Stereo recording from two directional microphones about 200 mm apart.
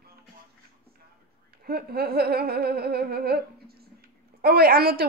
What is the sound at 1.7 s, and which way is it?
A woman's voice, 50° right (ahead or behind).